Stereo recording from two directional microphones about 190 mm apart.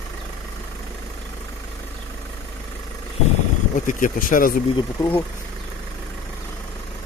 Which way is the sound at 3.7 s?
45° left (ahead or behind).